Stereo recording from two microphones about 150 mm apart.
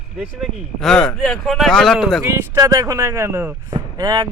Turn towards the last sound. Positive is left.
turn(degrees=-25)  # may be behind; listen again after turning